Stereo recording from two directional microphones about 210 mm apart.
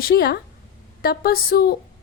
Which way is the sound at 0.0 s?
45° left (ahead or behind).